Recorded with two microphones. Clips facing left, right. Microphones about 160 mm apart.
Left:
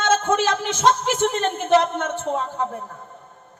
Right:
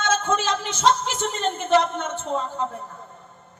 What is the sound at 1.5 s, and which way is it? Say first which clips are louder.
Speech: left 3 dB; 10° left (ahead or behind).